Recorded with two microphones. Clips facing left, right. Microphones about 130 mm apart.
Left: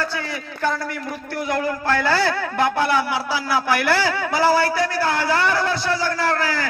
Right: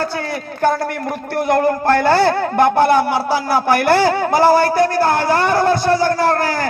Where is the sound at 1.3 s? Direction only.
55° right (ahead or behind).